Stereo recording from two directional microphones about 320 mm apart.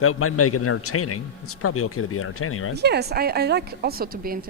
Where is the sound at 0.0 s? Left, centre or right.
Left.